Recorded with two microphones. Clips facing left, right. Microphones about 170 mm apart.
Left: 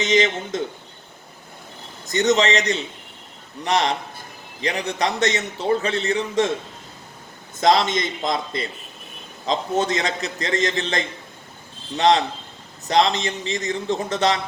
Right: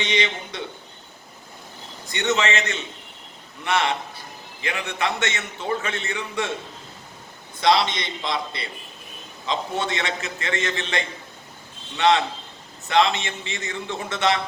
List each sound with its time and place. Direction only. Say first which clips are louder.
0.0 s a man's voice: left 6 dB; 45° left (ahead or behind)
2.0 s a man's voice: left 5 dB; 40° left (ahead or behind)
7.6 s a man's voice: left 2 dB; 45° left (ahead or behind)